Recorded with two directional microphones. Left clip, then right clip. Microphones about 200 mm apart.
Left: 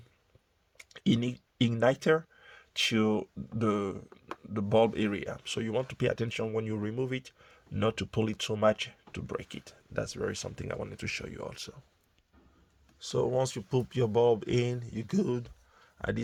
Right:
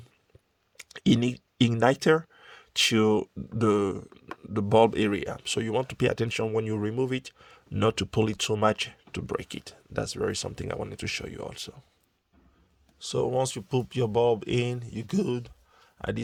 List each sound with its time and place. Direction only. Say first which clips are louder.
0.8 s speech: right 6 dB; 45° right (ahead or behind); by 11.8 s 30° right (ahead or behind)
13.0 s speech: right 2 dB; 20° right (ahead or behind)